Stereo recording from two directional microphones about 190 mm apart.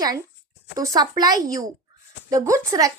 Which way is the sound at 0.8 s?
20° right (ahead or behind).